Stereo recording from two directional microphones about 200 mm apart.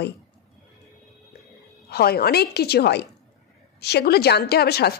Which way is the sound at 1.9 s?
50° left (ahead or behind).